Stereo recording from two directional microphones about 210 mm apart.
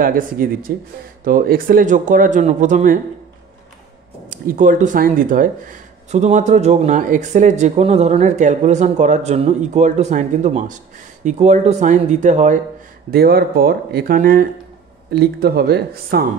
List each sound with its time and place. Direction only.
0.0 s speech: 40° right (ahead or behind)
4.3 s speech: 40° right (ahead or behind)
13.1 s speech: 45° right (ahead or behind)